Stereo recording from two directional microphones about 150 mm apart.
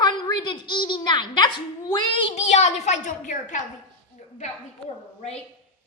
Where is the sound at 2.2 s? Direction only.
50° left (ahead or behind).